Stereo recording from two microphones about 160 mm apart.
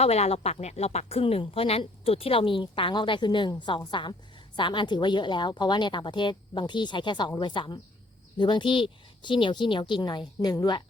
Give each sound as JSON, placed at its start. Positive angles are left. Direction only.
{"t": 0.0, "sound": "a woman's voice", "side_deg": 40}